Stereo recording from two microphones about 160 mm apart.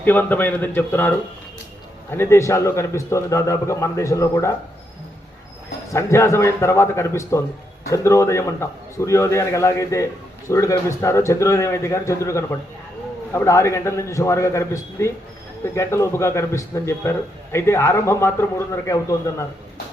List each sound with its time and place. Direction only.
0.0 s a man's voice: 10° left (ahead or behind)
5.9 s a man's voice: 20° left (ahead or behind)